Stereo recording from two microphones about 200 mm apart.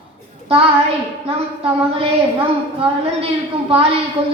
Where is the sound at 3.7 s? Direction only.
30° right (ahead or behind).